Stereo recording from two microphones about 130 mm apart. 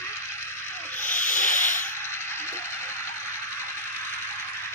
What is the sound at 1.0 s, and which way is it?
Sanding, 85° left.